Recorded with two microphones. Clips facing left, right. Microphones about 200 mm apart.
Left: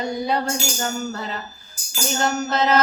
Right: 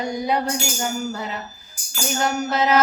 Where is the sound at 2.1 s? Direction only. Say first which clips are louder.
Even; 10° right (ahead or behind).